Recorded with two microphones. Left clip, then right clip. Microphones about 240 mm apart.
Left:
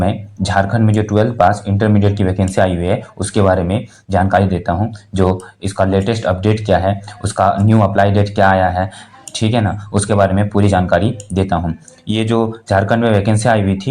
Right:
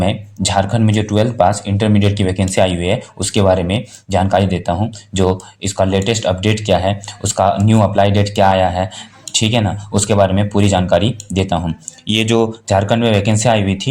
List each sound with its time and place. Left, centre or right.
0.0 s speech: right